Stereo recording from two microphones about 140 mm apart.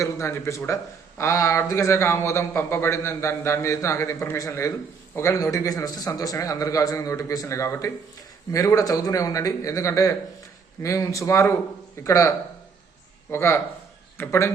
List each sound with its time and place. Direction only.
0.0 s a man's voice: 20° left (ahead or behind)
13.3 s a man's voice: 20° left (ahead or behind)